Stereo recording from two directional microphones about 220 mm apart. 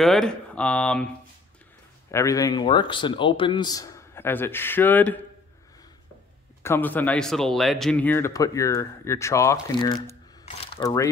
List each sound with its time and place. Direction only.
0.0 s speech: centre (ahead or behind)
2.0 s speech: 15° left (ahead or behind)
6.6 s speech: 10° left (ahead or behind)